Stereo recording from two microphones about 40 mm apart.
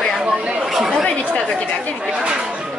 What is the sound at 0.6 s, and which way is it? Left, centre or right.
Chatter, centre.